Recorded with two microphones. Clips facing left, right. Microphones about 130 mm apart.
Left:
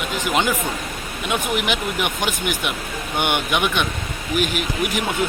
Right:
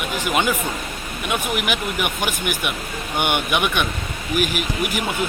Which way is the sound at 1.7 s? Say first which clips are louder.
Left 1 dB; 10° right (ahead or behind).